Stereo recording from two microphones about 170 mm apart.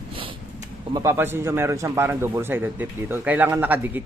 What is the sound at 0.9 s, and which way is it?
A man's voice, 15° right (ahead or behind).